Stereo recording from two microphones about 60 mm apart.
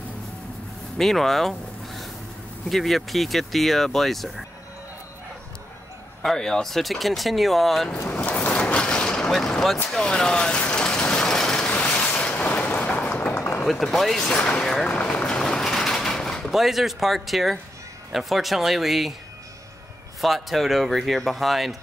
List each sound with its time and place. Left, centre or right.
0.9 s a sound: centre
2.7 s speech: centre
6.2 s speech: centre
8.1 s vehicle: left
9.3 s speech: centre
9.8 s vehicle: centre
12.0 s boat: left
12.8 s a sound: left
13.3 s a sound: left
13.7 s speech: centre
14.3 s speech: centre
15.3 s a sound: centre
18.1 s speech: centre
20.2 s speech: centre